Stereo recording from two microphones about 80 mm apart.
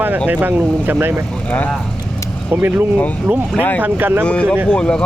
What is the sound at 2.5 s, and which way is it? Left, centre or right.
Speech, right.